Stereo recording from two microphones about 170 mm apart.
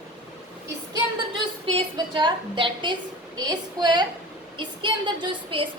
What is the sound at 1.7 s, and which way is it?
A woman's voice, 30° right (ahead or behind).